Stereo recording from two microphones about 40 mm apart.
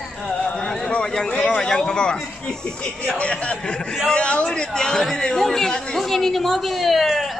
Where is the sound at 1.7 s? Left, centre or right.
Centre.